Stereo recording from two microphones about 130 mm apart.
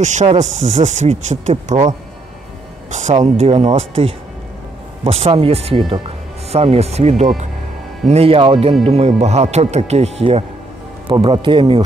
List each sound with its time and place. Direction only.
0.0 s speech: 65° right (ahead or behind)
3.4 s speech: 50° right (ahead or behind)
11.1 s a man's voice: 40° right (ahead or behind)